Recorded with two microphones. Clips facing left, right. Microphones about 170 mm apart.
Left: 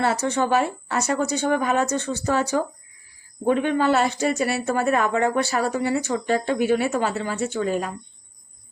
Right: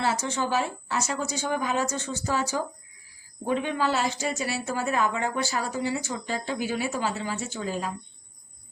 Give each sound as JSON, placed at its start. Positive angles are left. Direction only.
{"t": 0.0, "sound": "speech", "side_deg": 60}